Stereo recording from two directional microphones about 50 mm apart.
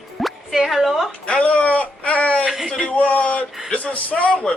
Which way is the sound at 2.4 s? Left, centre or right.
Centre.